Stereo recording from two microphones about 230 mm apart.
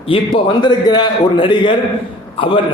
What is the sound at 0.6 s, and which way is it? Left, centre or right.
A man's voice, centre.